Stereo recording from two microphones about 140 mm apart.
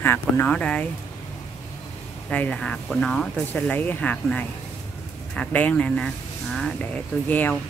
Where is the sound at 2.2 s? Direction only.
10° left (ahead or behind).